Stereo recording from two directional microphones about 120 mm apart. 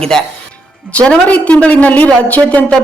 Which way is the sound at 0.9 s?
10° left (ahead or behind).